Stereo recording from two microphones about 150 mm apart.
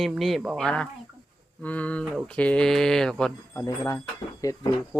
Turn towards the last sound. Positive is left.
turn(degrees=20)  # may be behind; listen again after turning